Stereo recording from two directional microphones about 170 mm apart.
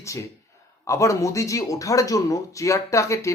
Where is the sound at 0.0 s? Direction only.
20° left (ahead or behind).